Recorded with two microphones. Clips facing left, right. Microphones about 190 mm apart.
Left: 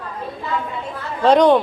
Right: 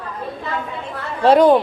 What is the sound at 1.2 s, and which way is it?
Speech, 5° right (ahead or behind).